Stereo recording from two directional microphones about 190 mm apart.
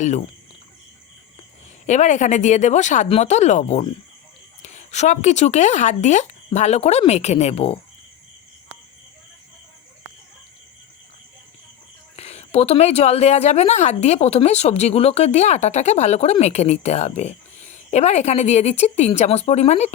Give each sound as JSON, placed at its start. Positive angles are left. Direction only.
{"t": 1.9, "sound": "a woman's voice", "side_deg": 40}
{"t": 12.1, "sound": "a woman's voice", "side_deg": 35}